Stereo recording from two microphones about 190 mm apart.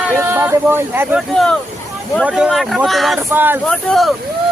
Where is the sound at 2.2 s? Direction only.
5° right (ahead or behind).